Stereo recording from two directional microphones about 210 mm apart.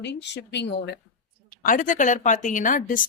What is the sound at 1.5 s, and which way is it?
A woman's voice, 40° left (ahead or behind).